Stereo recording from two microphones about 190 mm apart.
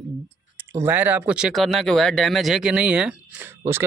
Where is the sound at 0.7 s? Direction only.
10° right (ahead or behind).